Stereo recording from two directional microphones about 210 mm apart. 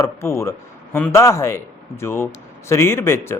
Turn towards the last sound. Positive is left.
turn(degrees=10)  # may be behind; listen again after turning